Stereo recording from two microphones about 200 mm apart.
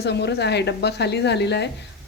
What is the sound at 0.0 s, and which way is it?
A woman's voice, 55° left (ahead or behind).